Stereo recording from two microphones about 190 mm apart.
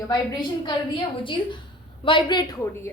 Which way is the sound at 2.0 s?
25° left (ahead or behind).